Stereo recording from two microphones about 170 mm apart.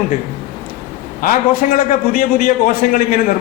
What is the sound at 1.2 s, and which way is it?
A man's voice, 55° left (ahead or behind).